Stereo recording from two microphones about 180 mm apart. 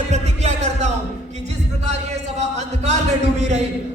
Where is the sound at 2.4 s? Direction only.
40° right (ahead or behind).